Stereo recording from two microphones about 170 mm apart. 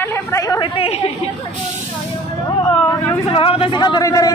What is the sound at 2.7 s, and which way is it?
Vehicle, 15° left (ahead or behind).